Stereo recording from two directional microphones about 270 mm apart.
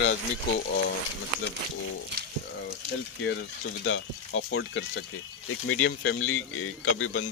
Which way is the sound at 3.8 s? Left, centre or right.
Left.